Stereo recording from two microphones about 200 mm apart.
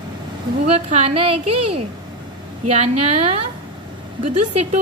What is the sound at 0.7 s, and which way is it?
A woman's voice, 35° right (ahead or behind).